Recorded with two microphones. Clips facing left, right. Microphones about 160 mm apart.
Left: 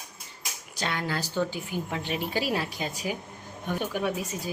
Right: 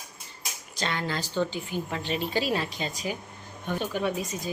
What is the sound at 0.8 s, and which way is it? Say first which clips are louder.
A woman's voice: even; 10° left (ahead or behind).